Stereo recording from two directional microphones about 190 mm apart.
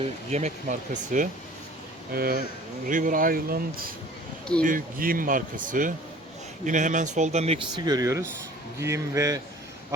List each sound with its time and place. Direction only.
0.3 s speech: 35° right (ahead or behind)
7.9 s speech: 20° right (ahead or behind)